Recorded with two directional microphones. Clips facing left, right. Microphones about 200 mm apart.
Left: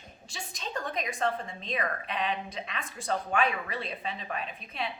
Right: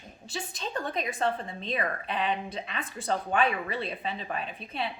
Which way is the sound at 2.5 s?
30° right (ahead or behind).